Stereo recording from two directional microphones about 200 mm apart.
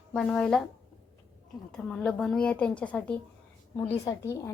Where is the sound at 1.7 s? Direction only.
5° left (ahead or behind).